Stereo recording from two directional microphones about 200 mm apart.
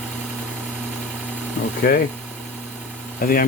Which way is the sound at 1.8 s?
45° left (ahead or behind).